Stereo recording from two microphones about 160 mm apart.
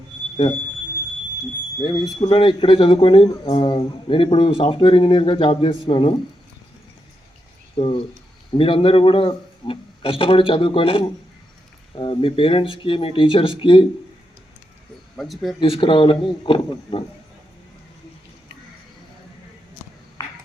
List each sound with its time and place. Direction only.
1.8 s speech: 35° left (ahead or behind)
7.8 s speech: 30° left (ahead or behind)
15.1 s speech: centre (ahead or behind)
15.6 s speech: 35° left (ahead or behind)